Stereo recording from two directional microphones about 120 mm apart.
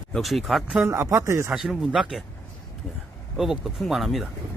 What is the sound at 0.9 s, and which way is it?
Speech, 25° right (ahead or behind).